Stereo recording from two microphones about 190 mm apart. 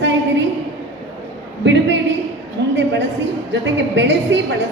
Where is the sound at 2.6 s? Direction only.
70° right (ahead or behind).